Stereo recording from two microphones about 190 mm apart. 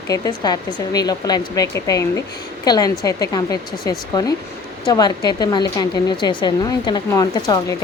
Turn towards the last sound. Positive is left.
turn(degrees=20)  # may be behind; listen again after turning